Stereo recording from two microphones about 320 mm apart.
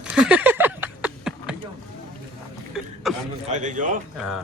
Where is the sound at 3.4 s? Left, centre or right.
Right.